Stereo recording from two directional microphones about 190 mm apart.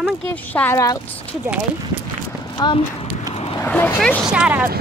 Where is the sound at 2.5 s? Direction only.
25° left (ahead or behind).